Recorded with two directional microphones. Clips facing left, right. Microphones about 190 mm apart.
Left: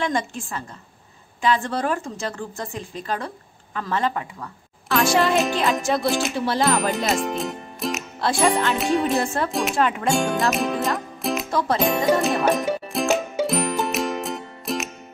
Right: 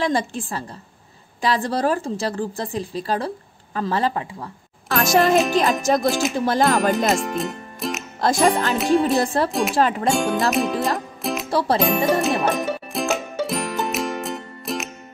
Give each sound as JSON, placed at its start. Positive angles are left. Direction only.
{"t": 0.0, "sound": "a woman's voice", "side_deg": -35}
{"t": 4.9, "sound": "music", "side_deg": -40}
{"t": 5.8, "sound": "a woman's voice", "side_deg": -40}
{"t": 6.0, "sound": "music", "side_deg": 0}
{"t": 6.4, "sound": "music", "side_deg": -45}
{"t": 7.1, "sound": "speech", "side_deg": 0}
{"t": 8.2, "sound": "music", "side_deg": -40}
{"t": 8.7, "sound": "music", "side_deg": 0}
{"t": 9.2, "sound": "a woman's voice", "side_deg": -35}
{"t": 9.5, "sound": "music", "side_deg": 0}
{"t": 9.8, "sound": "a woman's voice", "side_deg": -35}
{"t": 10.1, "sound": "music", "side_deg": 0}
{"t": 11.5, "sound": "music", "side_deg": -35}
{"t": 11.8, "sound": "music", "side_deg": 0}